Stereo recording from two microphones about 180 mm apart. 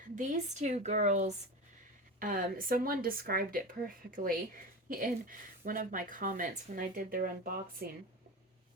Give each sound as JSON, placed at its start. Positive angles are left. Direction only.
{"t": 0.2, "sound": "a woman's voice", "side_deg": -40}
{"t": 2.1, "sound": "speech", "side_deg": -50}